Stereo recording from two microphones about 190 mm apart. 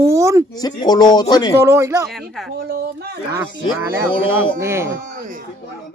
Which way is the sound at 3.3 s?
10° right (ahead or behind).